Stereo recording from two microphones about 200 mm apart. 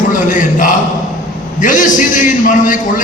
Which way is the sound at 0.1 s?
40° left (ahead or behind).